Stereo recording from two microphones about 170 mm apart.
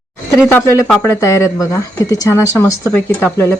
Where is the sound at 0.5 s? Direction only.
15° left (ahead or behind).